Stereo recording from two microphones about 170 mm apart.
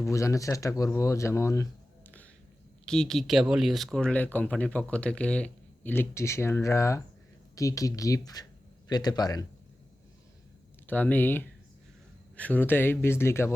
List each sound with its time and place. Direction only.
0.0 s speech: 15° left (ahead or behind)
2.8 s speech: 5° left (ahead or behind); by 9.5 s 20° left (ahead or behind)
10.8 s speech: 10° left (ahead or behind)